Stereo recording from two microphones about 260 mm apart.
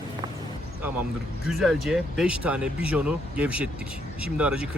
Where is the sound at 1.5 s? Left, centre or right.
Centre.